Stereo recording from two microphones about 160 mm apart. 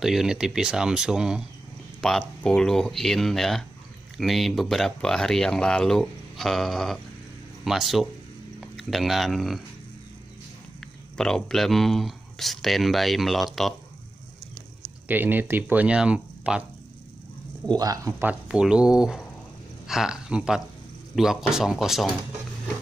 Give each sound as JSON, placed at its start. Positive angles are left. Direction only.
{"t": 0.0, "sound": "speech", "side_deg": -5}
{"t": 10.8, "sound": "speech", "side_deg": 5}
{"t": 15.0, "sound": "speech", "side_deg": -10}
{"t": 17.7, "sound": "speech", "side_deg": -20}
{"t": 18.2, "sound": "speech", "side_deg": -5}